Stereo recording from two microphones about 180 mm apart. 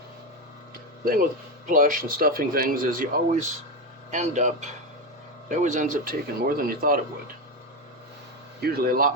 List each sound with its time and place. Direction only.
1.6 s speech: 50° right (ahead or behind)
8.6 s speech: 60° right (ahead or behind)